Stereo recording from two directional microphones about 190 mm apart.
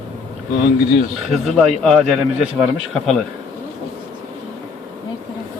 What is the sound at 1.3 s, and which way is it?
A man's voice, centre (ahead or behind).